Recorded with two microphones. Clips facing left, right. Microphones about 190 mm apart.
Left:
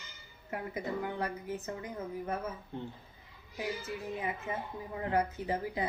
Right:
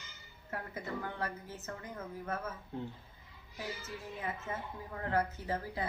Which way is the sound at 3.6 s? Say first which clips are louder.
Left 6 dB; 15° left (ahead or behind).